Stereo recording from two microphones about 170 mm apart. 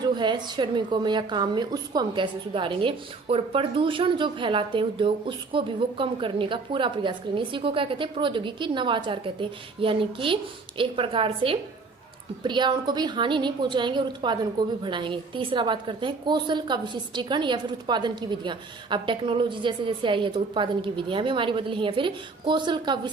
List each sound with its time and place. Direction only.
0.0 s a woman's voice: 25° right (ahead or behind)